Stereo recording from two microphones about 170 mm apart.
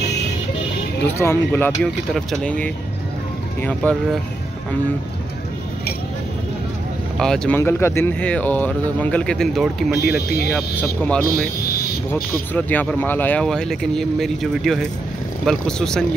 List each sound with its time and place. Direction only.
1.0 s speech: 15° left (ahead or behind)
7.2 s speech: 5° left (ahead or behind)
9.9 s speech: 65° left (ahead or behind)
10.5 s speech: 5° left (ahead or behind)